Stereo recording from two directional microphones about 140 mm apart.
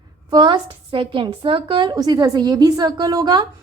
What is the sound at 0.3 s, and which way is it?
A woman's voice, 30° right (ahead or behind).